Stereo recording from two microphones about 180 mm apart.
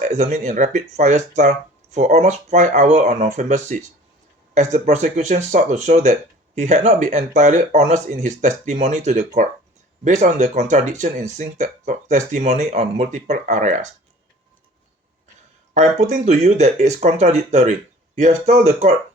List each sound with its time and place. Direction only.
0.0 s speech: 40° right (ahead or behind)
15.7 s speech: 40° right (ahead or behind)